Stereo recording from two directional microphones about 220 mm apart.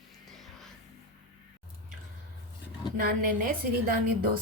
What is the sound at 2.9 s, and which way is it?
A woman's voice, 40° right (ahead or behind).